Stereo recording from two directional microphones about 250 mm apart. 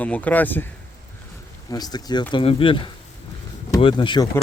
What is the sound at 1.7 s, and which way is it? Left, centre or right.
Speech, centre.